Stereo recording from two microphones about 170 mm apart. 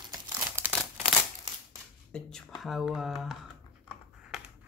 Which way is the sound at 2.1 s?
Centre (ahead or behind).